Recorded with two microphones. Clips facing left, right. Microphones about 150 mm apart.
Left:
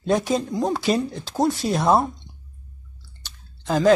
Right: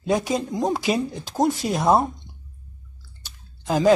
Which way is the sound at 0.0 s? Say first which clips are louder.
Left 1 dB; 10° right (ahead or behind).